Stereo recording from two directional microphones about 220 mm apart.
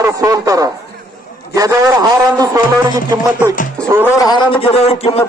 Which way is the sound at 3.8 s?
10° right (ahead or behind).